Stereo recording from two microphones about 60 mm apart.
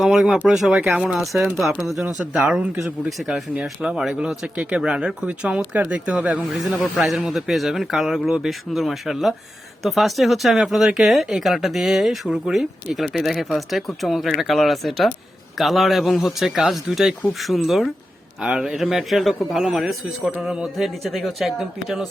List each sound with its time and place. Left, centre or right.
0.0 s speech: centre
2.0 s speech: centre
3.5 s speech: centre
6.9 s speech: centre
18.4 s speech: centre